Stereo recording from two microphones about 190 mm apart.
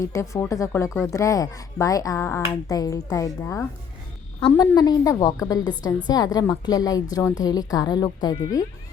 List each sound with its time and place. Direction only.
0.0 s a woman's voice: 15° left (ahead or behind)